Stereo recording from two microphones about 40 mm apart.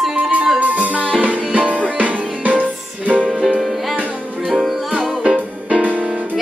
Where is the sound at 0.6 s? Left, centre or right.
Right.